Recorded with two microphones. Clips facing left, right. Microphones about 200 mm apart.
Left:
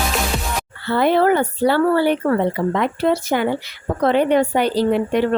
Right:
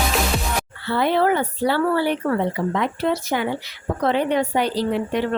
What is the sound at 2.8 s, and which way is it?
A woman's voice, 50° left (ahead or behind).